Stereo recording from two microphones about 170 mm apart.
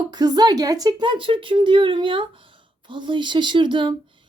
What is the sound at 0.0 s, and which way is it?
Speech, 25° right (ahead or behind).